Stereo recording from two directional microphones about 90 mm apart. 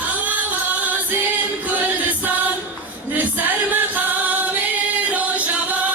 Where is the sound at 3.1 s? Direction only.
20° right (ahead or behind).